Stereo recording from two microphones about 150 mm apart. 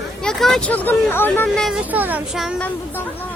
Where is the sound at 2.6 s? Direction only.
10° left (ahead or behind).